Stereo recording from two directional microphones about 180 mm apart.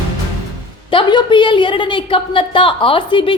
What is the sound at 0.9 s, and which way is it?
A woman's voice, 30° left (ahead or behind).